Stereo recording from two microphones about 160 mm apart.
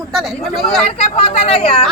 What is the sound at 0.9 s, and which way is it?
Speech, 40° left (ahead or behind).